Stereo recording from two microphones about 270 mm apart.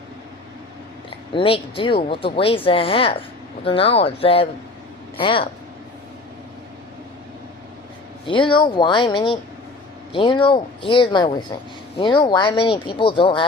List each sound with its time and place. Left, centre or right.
1.3 s speech: centre
8.3 s speech: centre